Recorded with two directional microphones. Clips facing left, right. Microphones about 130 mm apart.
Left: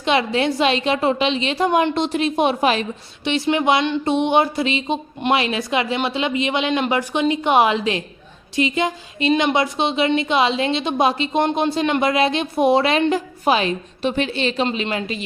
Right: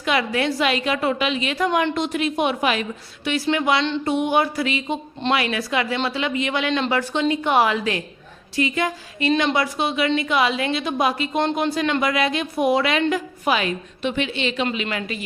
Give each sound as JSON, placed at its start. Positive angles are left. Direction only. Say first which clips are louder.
{"t": 0.0, "sound": "a woman's voice", "louder": "left 3 dB", "side_deg": 25}